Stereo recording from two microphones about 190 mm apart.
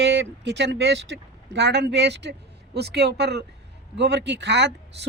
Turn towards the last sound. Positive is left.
turn(degrees=-65)  # may be behind; listen again after turning